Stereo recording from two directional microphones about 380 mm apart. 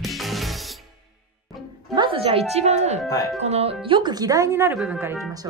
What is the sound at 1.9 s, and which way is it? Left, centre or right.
Speech, centre.